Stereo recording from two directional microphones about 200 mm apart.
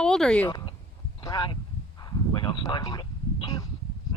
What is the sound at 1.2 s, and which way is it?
Speech, 20° left (ahead or behind).